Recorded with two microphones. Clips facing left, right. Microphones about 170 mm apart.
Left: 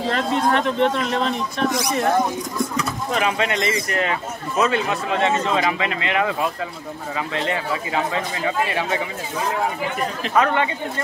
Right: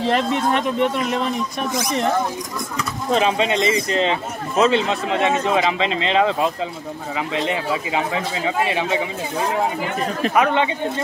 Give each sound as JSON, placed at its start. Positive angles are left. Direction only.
{"t": 0.1, "sound": "speech", "side_deg": -15}
{"t": 3.2, "sound": "speech", "side_deg": -25}
{"t": 10.3, "sound": "speech", "side_deg": -15}